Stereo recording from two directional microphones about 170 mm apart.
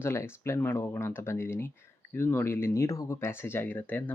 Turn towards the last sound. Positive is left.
turn(degrees=10)  # may be behind; listen again after turning